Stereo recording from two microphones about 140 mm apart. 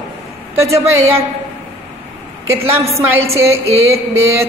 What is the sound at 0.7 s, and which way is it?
Speech, 20° right (ahead or behind).